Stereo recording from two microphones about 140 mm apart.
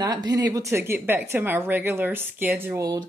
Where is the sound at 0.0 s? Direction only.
25° right (ahead or behind).